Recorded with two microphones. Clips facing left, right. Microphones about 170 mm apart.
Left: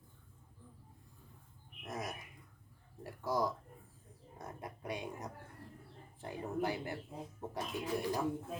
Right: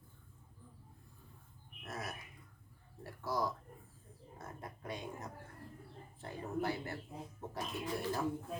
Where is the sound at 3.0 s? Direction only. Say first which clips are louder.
Left 2 dB; 15° left (ahead or behind).